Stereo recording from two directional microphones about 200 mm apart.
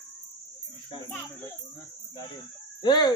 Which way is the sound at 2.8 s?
20° left (ahead or behind).